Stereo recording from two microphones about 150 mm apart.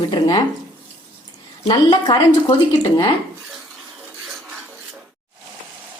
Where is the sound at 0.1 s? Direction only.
30° left (ahead or behind).